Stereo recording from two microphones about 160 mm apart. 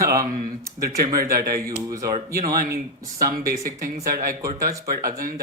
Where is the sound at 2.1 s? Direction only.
65° right (ahead or behind).